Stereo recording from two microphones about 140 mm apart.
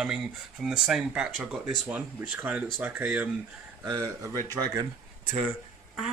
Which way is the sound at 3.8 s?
20° right (ahead or behind).